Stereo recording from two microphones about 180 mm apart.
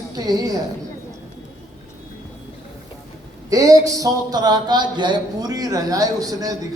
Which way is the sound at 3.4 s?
20° right (ahead or behind).